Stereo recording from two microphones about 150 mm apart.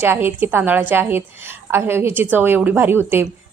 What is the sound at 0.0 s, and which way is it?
A woman's voice, 15° right (ahead or behind).